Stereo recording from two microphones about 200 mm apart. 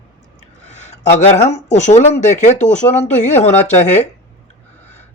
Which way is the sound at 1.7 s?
35° left (ahead or behind).